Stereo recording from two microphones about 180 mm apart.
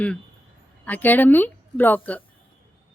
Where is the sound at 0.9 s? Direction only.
10° left (ahead or behind).